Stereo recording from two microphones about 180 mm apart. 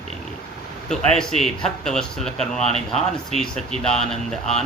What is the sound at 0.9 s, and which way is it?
Speech, 5° left (ahead or behind).